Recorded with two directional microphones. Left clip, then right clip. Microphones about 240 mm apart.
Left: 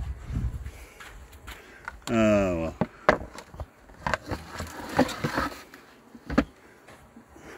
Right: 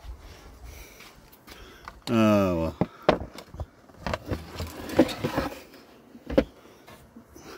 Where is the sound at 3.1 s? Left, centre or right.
Centre.